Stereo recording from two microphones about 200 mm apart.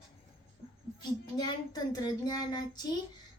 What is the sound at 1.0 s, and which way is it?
A woman's voice, 20° left (ahead or behind).